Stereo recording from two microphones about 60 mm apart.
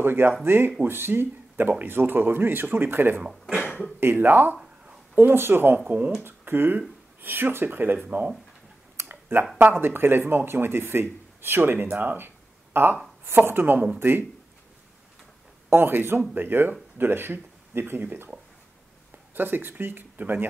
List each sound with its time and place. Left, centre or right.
0.0 s speech: right
3.2 s speech: centre
4.0 s speech: right
5.9 s speech: right
6.2 s speech: right
8.9 s a sound: right
9.6 s a woman's voice: right
15.7 s speech: right
19.3 s speech: right